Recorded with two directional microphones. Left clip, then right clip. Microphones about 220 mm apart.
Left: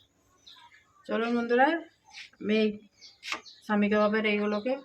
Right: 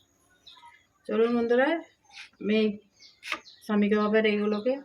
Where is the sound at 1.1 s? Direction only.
Centre (ahead or behind).